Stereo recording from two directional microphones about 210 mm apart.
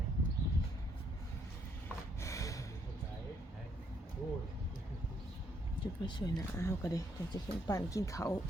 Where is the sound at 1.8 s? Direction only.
15° left (ahead or behind).